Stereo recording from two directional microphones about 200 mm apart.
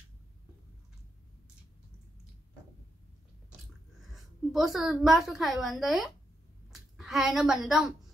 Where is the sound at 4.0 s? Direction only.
Centre (ahead or behind).